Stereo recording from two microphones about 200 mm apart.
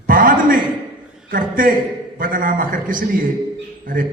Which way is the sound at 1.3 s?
45° right (ahead or behind).